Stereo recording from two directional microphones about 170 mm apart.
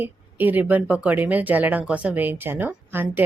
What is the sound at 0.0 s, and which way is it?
Speech, 10° right (ahead or behind).